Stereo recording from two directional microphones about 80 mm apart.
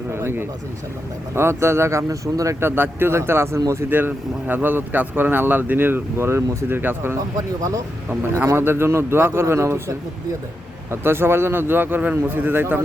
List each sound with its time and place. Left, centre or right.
0.1 s a sound: right
1.4 s speech: right
7.3 s speech: right
8.5 s speech: right
11.0 s speech: right